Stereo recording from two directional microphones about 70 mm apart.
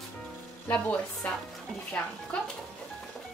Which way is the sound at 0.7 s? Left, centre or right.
Left.